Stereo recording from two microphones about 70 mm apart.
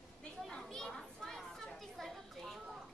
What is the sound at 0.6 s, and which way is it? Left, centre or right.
Children playing, centre.